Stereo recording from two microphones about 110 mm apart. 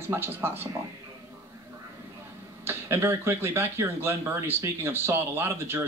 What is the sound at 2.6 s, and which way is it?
Speech, 20° right (ahead or behind).